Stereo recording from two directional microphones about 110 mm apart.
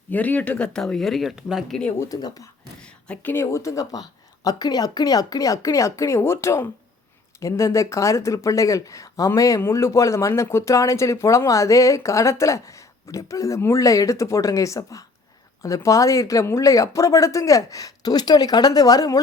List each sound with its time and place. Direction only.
0.1 s speech: 15° left (ahead or behind)
2.0 s speech: 35° left (ahead or behind)
2.8 s a sound: 10° left (ahead or behind)
3.3 s speech: 25° left (ahead or behind)